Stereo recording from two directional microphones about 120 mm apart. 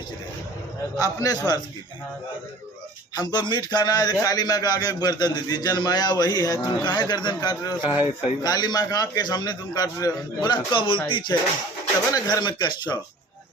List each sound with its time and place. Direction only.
0.9 s a man's voice: 30° left (ahead or behind)
3.2 s a man's voice: 35° left (ahead or behind)